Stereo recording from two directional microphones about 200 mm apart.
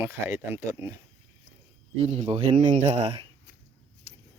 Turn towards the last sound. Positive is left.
turn(degrees=-30)  # may be behind; listen again after turning